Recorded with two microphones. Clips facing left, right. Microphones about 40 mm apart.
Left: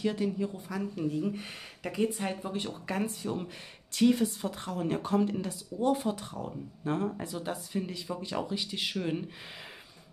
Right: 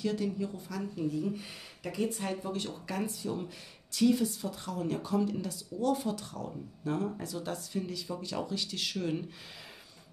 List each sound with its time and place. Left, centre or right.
0.0 s speech: left
0.9 s speech: left
2.0 s speech: left